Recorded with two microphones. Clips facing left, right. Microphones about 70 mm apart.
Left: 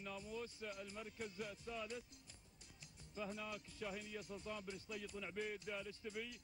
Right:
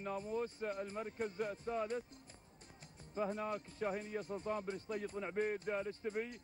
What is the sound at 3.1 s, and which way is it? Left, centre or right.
Speech, right.